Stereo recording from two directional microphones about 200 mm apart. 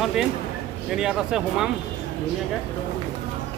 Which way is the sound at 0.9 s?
5° right (ahead or behind).